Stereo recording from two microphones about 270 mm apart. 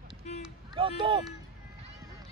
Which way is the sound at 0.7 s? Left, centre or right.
Centre.